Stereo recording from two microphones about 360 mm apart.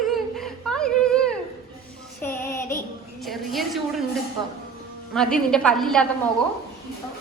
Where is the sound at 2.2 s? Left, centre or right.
Centre.